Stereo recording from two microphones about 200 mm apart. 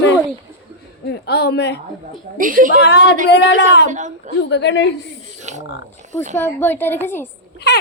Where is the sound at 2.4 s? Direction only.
40° right (ahead or behind).